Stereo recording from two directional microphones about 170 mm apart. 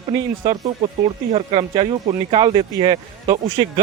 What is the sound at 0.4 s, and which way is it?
Speech, 25° right (ahead or behind).